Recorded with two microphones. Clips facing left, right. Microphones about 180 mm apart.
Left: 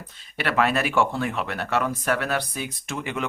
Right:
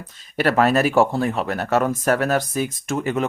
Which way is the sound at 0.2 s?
40° right (ahead or behind).